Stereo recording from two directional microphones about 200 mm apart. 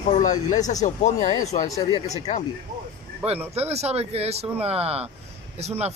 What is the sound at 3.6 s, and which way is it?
Speech, 30° right (ahead or behind).